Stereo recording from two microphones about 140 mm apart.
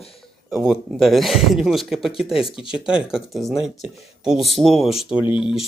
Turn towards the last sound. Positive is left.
turn(degrees=-5)  # may be behind; listen again after turning